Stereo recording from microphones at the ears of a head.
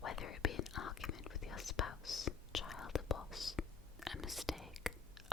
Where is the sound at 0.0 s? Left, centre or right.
Left.